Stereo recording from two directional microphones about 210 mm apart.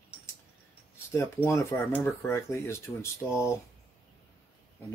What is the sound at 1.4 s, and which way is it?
Speech, 15° left (ahead or behind).